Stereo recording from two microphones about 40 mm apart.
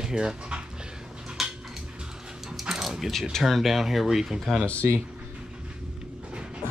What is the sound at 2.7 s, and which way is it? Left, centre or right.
Coin, centre.